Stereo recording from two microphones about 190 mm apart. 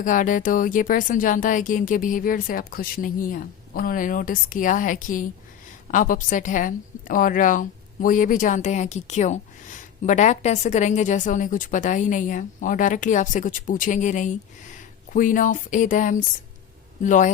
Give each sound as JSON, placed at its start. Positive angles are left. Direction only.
{"t": 0.0, "sound": "a woman's voice", "side_deg": 45}